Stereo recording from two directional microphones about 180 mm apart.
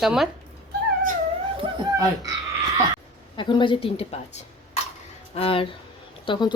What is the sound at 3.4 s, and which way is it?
A woman's voice, 25° left (ahead or behind).